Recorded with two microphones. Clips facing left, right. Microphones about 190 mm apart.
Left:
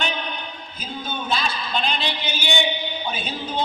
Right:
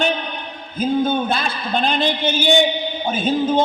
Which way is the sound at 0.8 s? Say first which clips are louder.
Right 14 dB; 55° right (ahead or behind).